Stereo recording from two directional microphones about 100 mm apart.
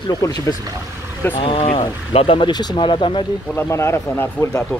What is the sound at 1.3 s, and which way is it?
Speech, 65° left (ahead or behind).